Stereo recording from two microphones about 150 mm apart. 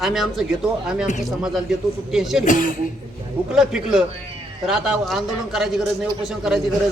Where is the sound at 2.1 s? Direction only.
5° right (ahead or behind).